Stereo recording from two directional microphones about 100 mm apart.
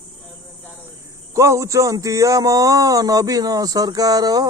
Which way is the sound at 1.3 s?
30° right (ahead or behind).